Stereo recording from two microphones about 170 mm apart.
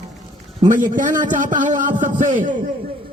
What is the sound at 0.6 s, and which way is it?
A man's voice, 50° right (ahead or behind).